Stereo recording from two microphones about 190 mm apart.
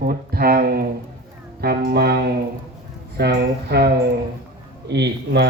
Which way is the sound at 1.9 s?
55° right (ahead or behind).